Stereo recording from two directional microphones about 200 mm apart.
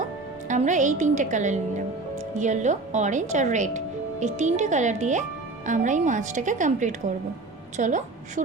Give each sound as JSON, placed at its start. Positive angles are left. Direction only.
{"t": 0.0, "sound": "a woman's voice", "side_deg": -35}